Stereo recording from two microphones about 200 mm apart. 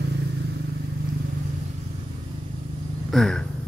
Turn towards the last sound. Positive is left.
turn(degrees=5)  # may be behind; listen again after turning